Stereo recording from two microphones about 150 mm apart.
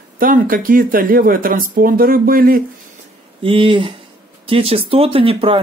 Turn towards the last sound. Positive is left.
turn(degrees=-40)  # may be behind; listen again after turning